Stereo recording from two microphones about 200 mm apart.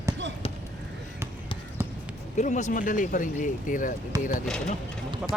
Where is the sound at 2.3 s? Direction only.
40° left (ahead or behind).